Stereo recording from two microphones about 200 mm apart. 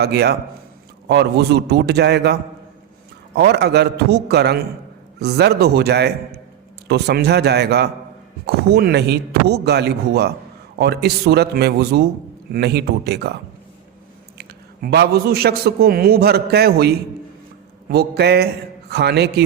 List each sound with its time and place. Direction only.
0.0 s a man's voice: 55° right (ahead or behind)
14.3 s a man's voice: 55° right (ahead or behind)